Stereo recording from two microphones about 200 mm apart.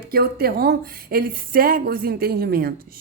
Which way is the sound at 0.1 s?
50° right (ahead or behind).